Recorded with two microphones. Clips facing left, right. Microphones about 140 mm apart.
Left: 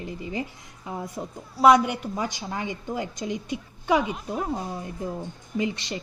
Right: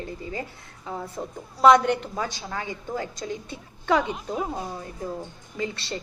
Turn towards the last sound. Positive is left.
turn(degrees=15)  # may be behind; listen again after turning